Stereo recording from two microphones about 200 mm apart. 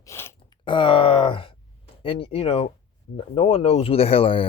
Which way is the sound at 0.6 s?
25° left (ahead or behind).